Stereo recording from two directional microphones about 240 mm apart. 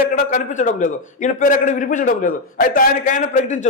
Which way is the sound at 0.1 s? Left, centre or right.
Left.